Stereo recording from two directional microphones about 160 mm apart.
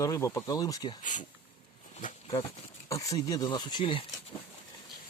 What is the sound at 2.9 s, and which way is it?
Speech, 20° left (ahead or behind).